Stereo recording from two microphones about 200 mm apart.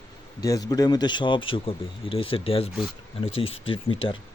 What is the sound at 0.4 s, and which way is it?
Speech, 20° left (ahead or behind).